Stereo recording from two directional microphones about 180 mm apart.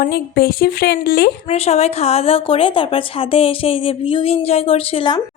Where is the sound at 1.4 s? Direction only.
35° left (ahead or behind).